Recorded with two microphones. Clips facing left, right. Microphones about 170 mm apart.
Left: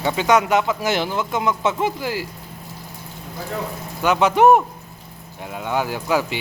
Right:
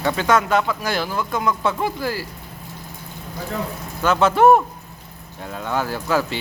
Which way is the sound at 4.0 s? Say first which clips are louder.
Even; 15° left (ahead or behind).